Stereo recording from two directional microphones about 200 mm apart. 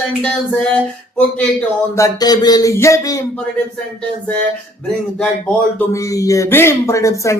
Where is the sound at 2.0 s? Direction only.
20° left (ahead or behind).